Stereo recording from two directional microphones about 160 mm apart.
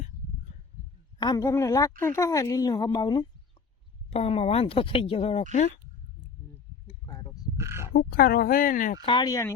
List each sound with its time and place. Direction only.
1.2 s a woman's voice: 20° left (ahead or behind)
4.1 s speech: 40° left (ahead or behind)
6.8 s a sound: 30° left (ahead or behind)
7.5 s a sound: 15° right (ahead or behind)
7.9 s speech: 75° left (ahead or behind); by 9.0 s 60° left (ahead or behind)
9.0 s a woman's voice: 30° left (ahead or behind)